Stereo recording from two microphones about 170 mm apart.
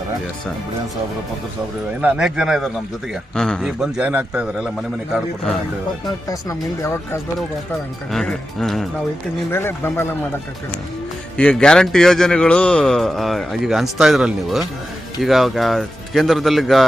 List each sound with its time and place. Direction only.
2.0 s a man's voice: 5° right (ahead or behind)
6.2 s speech: 15° left (ahead or behind)
8.1 s a man's voice: centre (ahead or behind)
9.5 s speech: 15° left (ahead or behind)
11.3 s a man's voice: 5° left (ahead or behind)